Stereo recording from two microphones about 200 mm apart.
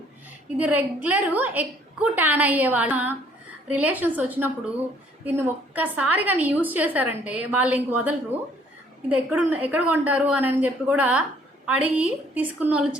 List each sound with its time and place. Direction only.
0.5 s a woman's voice: 5° right (ahead or behind)
9.0 s a woman's voice: 10° right (ahead or behind)